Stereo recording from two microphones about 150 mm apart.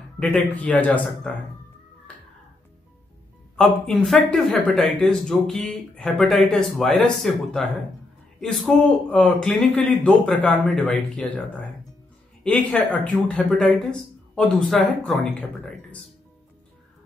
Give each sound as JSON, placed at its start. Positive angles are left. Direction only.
{"t": 0.2, "sound": "a man's voice", "side_deg": 10}
{"t": 3.5, "sound": "a man's voice", "side_deg": 5}
{"t": 12.4, "sound": "a man's voice", "side_deg": 10}